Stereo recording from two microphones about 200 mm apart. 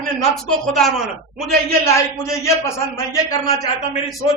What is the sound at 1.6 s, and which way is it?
A man's voice, 15° left (ahead or behind).